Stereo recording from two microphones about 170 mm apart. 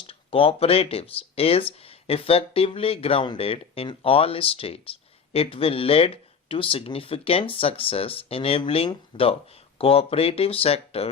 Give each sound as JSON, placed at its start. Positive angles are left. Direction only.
{"t": 0.1, "sound": "speech", "side_deg": 30}